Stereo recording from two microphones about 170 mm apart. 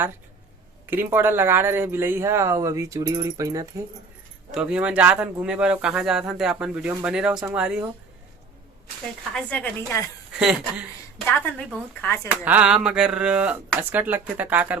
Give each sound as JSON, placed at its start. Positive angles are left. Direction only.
{"t": 0.9, "sound": "speech", "side_deg": -10}
{"t": 4.5, "sound": "speech", "side_deg": -5}
{"t": 9.3, "sound": "speech", "side_deg": 10}
{"t": 10.3, "sound": "speech", "side_deg": -5}
{"t": 11.3, "sound": "speech", "side_deg": 10}
{"t": 12.5, "sound": "speech", "side_deg": -5}